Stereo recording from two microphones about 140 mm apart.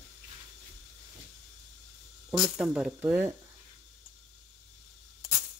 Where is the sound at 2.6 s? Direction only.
5° right (ahead or behind).